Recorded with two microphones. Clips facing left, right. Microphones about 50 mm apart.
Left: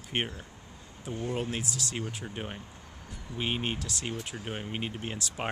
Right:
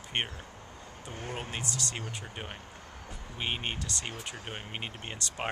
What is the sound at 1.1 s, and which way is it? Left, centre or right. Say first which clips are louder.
Speech: left 6 dB; right.